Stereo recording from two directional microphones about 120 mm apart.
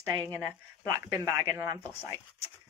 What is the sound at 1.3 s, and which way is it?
Speech, 25° right (ahead or behind).